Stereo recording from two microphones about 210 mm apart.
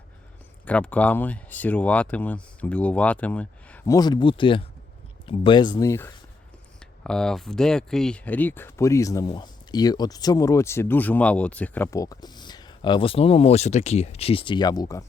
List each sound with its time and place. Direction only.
0.6 s speech: 5° left (ahead or behind)
7.0 s speech: 5° left (ahead or behind)